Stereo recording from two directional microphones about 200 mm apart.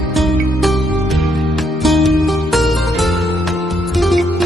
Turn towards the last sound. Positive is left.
turn(degrees=0)  # may be behind; listen again after turning